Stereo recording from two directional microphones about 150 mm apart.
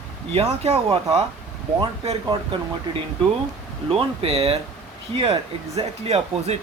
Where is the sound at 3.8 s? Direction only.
40° right (ahead or behind).